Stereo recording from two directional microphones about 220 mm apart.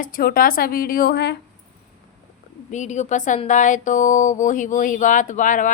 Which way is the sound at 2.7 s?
30° left (ahead or behind).